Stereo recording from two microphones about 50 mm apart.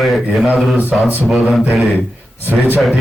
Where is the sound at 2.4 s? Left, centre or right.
Right.